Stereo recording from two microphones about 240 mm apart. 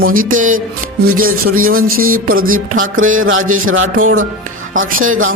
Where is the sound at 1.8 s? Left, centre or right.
Right.